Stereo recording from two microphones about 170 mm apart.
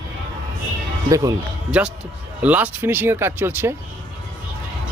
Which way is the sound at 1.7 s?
5° right (ahead or behind).